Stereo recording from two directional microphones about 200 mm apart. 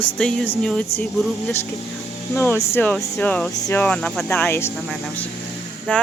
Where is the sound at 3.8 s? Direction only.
5° left (ahead or behind).